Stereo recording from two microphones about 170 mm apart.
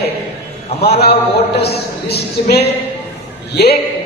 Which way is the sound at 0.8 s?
70° left (ahead or behind).